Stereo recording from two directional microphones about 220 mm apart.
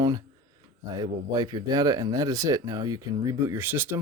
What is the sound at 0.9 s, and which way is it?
Speech, 20° right (ahead or behind).